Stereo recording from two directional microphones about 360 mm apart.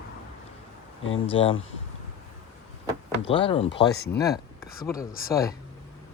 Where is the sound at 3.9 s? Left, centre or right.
Left.